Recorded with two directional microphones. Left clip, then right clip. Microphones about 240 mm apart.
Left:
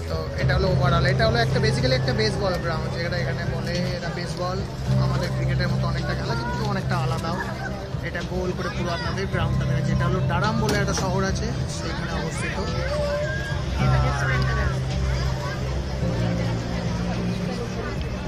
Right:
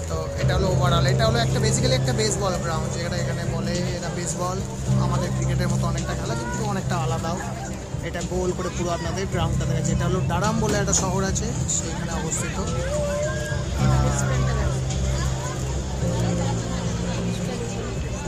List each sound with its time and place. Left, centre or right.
0.5 s speech: centre
6.7 s speech: centre
10.3 s speech: centre